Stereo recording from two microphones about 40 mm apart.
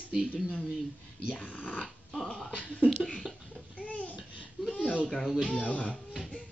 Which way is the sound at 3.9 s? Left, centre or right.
Left.